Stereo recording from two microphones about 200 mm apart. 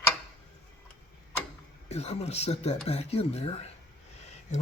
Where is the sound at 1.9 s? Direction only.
30° left (ahead or behind).